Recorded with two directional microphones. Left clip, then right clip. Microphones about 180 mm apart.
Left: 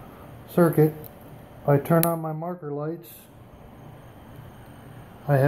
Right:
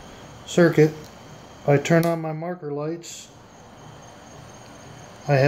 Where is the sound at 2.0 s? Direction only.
15° right (ahead or behind).